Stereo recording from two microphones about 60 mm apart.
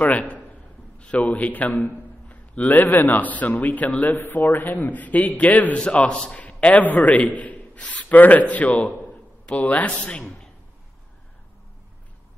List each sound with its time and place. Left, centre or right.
0.0 s a man's voice: left